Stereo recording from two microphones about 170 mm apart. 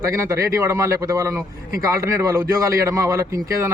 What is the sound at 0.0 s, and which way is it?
Speech, 15° right (ahead or behind).